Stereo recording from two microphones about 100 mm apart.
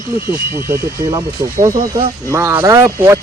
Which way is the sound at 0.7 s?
30° right (ahead or behind).